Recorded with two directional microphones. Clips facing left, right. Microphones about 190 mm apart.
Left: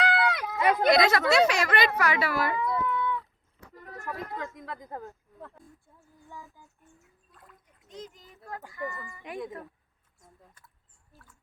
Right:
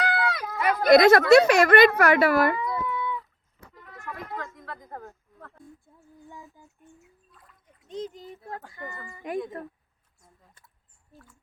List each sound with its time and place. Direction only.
0.0 s a sound: centre (ahead or behind)
0.6 s a sound: 20° left (ahead or behind)
0.9 s speech: 50° right (ahead or behind)
2.8 s cat: 15° right (ahead or behind)
3.8 s a sound: 40° left (ahead or behind)
4.5 s speech: 15° left (ahead or behind)
6.1 s speech: 20° right (ahead or behind)
7.3 s splash: centre (ahead or behind)
8.2 s speech: 25° right (ahead or behind)